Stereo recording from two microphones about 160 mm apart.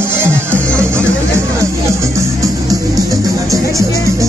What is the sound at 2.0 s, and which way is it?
Music, 20° right (ahead or behind).